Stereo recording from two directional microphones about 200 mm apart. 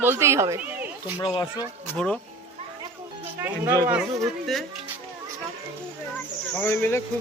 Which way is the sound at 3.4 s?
15° right (ahead or behind).